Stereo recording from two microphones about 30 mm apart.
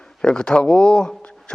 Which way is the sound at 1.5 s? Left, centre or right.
Left.